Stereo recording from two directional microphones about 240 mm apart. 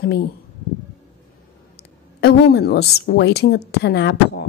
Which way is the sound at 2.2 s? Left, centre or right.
Left.